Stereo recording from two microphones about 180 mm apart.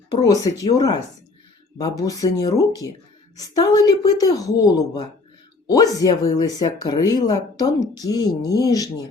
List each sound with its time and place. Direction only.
0.1 s speech: 20° left (ahead or behind)